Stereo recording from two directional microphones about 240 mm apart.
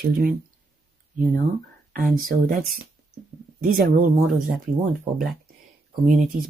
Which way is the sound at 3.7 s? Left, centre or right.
Right.